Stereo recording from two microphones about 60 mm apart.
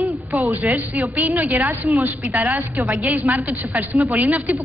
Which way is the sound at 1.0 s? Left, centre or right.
Right.